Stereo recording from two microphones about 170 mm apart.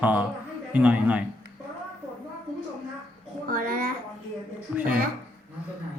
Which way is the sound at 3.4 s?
55° right (ahead or behind).